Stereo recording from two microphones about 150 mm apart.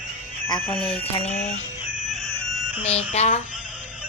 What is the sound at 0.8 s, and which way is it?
Music, 40° left (ahead or behind).